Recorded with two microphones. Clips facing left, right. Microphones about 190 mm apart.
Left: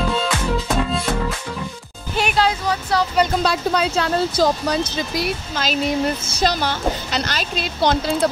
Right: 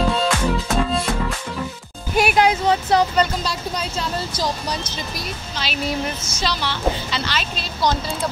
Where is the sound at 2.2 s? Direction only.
15° right (ahead or behind).